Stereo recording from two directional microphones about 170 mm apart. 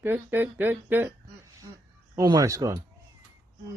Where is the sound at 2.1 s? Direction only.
20° right (ahead or behind).